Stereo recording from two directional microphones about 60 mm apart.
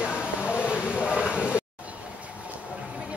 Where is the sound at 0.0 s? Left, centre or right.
Centre.